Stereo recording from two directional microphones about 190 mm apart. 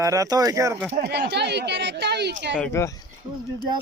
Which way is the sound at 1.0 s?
60° right (ahead or behind).